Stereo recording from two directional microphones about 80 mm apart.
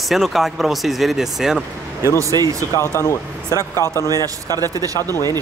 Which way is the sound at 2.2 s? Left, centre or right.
Right.